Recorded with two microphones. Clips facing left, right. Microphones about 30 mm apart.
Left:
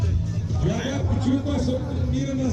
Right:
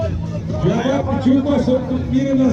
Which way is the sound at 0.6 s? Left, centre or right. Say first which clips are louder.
Right 9 dB; centre.